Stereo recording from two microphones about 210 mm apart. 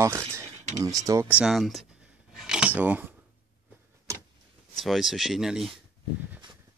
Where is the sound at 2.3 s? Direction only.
5° right (ahead or behind).